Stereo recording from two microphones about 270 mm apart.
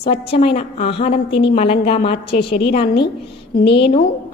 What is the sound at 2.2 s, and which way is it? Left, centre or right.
Speech, left.